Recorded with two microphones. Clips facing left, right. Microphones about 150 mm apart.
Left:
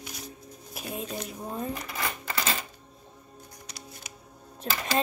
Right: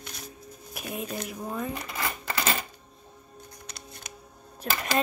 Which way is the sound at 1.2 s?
35° left (ahead or behind).